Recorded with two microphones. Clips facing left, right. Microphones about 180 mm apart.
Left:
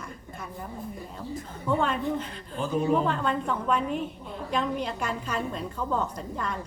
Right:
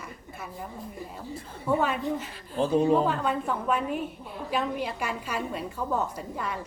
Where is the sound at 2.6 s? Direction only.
35° right (ahead or behind).